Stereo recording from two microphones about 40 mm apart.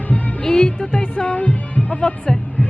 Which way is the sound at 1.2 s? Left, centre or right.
Left.